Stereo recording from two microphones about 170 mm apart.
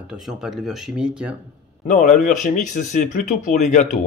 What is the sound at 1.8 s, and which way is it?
Speech, 45° left (ahead or behind).